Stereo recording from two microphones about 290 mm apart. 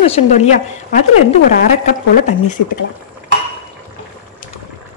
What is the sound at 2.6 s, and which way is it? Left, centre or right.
Speech, left.